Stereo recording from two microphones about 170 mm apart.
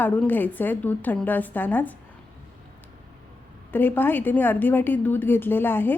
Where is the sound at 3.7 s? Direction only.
10° left (ahead or behind).